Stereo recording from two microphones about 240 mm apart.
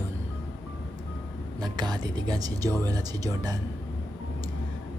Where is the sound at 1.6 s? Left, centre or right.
Centre.